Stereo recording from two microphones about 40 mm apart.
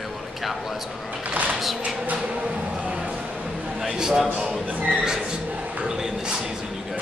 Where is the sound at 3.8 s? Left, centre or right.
Centre.